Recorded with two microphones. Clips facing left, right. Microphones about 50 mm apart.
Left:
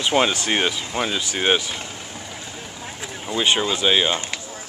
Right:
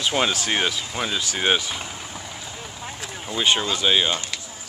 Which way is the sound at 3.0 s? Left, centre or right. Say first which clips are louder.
Left 3 dB; centre.